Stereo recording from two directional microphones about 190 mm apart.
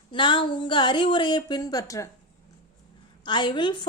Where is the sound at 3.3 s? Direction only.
25° left (ahead or behind).